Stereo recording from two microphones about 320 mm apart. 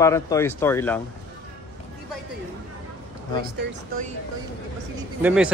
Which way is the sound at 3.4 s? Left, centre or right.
Right.